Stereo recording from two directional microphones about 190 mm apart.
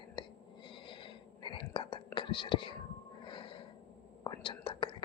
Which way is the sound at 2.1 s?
25° left (ahead or behind).